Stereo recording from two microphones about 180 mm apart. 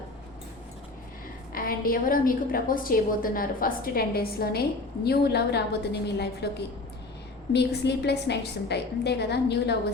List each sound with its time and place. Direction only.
1.5 s a woman's voice: 55° left (ahead or behind)
7.5 s a woman's voice: 70° left (ahead or behind)